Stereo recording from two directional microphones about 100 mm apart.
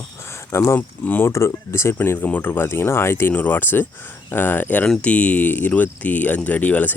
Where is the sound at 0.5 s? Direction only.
25° left (ahead or behind).